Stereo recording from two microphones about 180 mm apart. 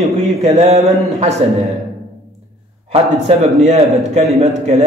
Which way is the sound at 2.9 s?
35° right (ahead or behind).